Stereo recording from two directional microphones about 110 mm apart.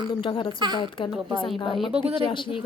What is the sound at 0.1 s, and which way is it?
Speech, 50° left (ahead or behind).